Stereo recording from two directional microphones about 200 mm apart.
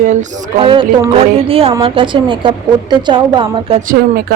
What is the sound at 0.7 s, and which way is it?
Speech, 25° right (ahead or behind).